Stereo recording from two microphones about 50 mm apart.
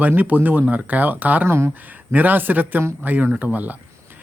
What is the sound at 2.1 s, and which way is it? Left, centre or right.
Speech, right.